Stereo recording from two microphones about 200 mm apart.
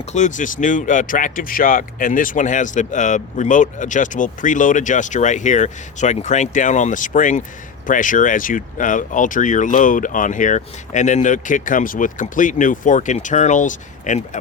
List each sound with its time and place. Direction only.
0.1 s speech: 35° left (ahead or behind)